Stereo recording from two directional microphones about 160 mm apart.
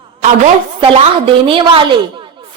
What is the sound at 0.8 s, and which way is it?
A woman's voice, 30° right (ahead or behind).